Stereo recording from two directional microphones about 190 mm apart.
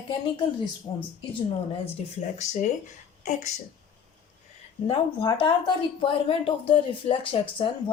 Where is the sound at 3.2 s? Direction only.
40° left (ahead or behind).